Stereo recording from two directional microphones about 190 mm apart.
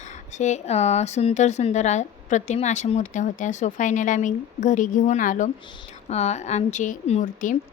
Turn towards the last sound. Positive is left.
turn(degrees=45)  # may be behind; listen again after turning